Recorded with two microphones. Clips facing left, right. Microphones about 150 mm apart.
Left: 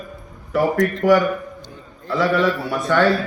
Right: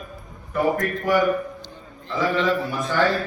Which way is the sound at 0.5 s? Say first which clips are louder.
Left 4 dB; 90° left.